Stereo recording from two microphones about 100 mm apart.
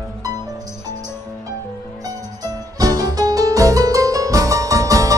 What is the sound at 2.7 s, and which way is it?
Music, 40° right (ahead or behind).